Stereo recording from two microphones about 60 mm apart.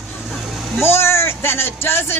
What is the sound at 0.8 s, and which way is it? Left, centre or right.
Speech, left.